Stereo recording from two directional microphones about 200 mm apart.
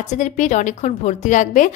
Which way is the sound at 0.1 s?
35° left (ahead or behind).